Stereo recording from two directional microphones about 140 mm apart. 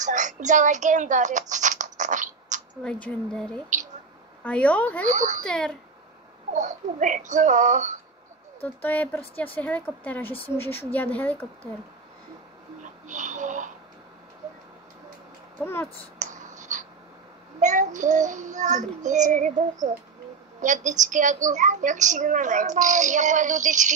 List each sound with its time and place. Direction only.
0.0 s speech: 60° right (ahead or behind)
2.8 s speech: 5° left (ahead or behind)
5.0 s a woman's voice: 60° right (ahead or behind)
6.5 s a woman's voice: 65° right (ahead or behind)
8.6 s speech: 10° left (ahead or behind)
13.0 s music: 65° right (ahead or behind)
15.6 s speech: 15° left (ahead or behind)
16.2 s writing: 65° right (ahead or behind)
17.6 s a woman's voice: 65° right (ahead or behind)